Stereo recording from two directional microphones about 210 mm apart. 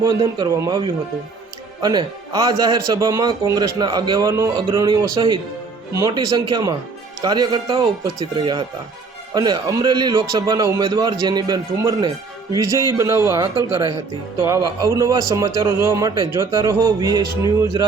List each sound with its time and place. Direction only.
0.0 s a man's voice: 20° right (ahead or behind)
1.8 s a man's voice: 20° right (ahead or behind)